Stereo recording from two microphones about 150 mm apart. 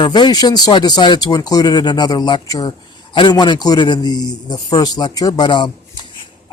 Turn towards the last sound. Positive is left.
turn(degrees=30)  # may be behind; listen again after turning